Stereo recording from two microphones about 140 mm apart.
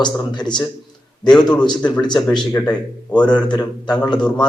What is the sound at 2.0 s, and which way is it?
Speech, 30° left (ahead or behind).